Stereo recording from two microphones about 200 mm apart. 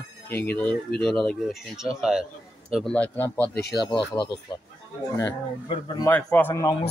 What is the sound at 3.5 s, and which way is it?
Speech, 50° left (ahead or behind).